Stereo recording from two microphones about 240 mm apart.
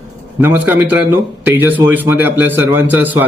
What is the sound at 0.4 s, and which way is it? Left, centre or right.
A man's voice, centre.